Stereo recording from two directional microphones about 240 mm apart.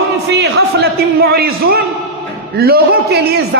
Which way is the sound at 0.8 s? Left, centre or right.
Right.